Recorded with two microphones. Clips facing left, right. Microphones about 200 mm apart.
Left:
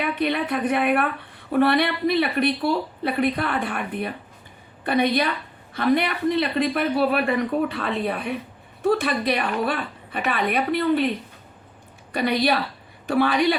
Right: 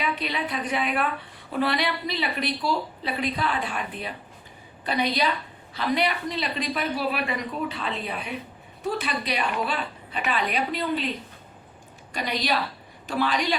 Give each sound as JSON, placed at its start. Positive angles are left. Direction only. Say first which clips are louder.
{"t": 0.0, "sound": "speech", "louder": "left 5 dB", "side_deg": 55}
{"t": 12.1, "sound": "speech", "louder": "left 6 dB", "side_deg": 60}